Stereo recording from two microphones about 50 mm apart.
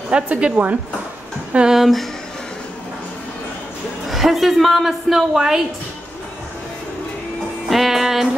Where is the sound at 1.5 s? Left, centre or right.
Centre.